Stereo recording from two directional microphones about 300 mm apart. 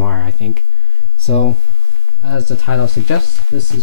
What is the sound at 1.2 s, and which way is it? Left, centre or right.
Speech, left.